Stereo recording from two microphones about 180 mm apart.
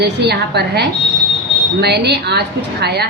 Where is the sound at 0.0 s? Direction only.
65° right (ahead or behind).